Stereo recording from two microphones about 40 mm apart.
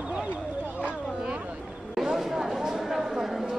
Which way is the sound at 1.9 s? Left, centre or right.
Centre.